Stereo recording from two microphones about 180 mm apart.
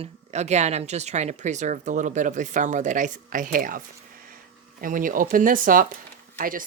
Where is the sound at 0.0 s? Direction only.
40° right (ahead or behind).